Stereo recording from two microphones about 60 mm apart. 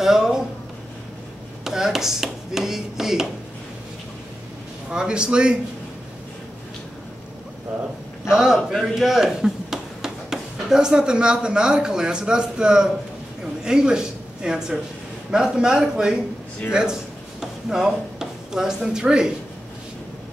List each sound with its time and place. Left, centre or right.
0.0 s a sound: centre
1.6 s speech: centre
4.9 s speech: centre
8.3 s speech: centre
13.4 s a sound: centre
15.3 s speech: centre